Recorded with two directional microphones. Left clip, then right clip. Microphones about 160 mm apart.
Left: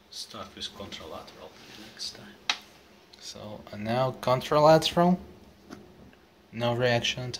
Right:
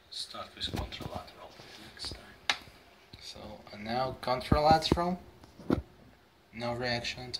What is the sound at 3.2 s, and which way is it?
Speech, 45° left (ahead or behind).